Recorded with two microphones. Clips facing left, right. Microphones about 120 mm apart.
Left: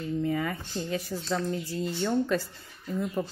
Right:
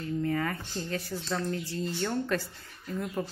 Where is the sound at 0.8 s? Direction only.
15° left (ahead or behind).